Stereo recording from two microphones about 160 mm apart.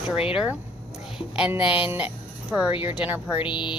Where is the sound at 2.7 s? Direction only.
35° left (ahead or behind).